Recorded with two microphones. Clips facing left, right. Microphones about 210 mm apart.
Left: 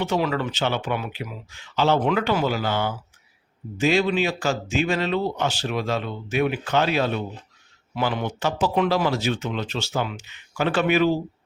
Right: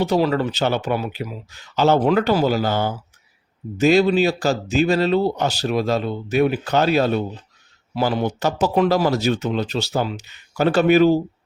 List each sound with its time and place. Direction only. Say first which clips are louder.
0.0 s speech: right 5 dB; 35° right (ahead or behind)